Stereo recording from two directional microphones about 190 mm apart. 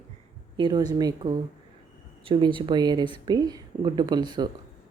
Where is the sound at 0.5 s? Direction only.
25° right (ahead or behind).